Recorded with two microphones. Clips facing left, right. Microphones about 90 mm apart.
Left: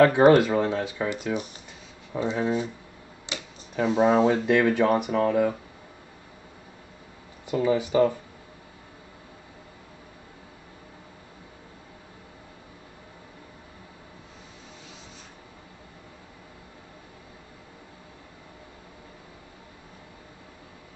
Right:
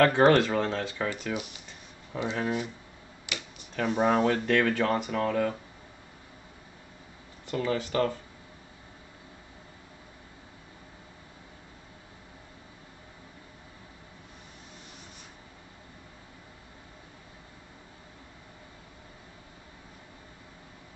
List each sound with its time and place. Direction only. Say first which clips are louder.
0.0 s speech: left 4 dB; 10° left (ahead or behind)
1.3 s speech: left 4 dB; 35° left (ahead or behind)
2.2 s speech: left 4 dB; 20° left (ahead or behind)
3.3 s a sound: left 2 dB; 25° left (ahead or behind)
3.7 s speech: left 4 dB; 15° left (ahead or behind)
7.4 s speech: left 6 dB; 15° left (ahead or behind)